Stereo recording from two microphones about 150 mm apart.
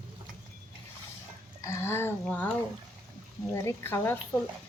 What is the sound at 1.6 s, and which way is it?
Speech, 20° left (ahead or behind).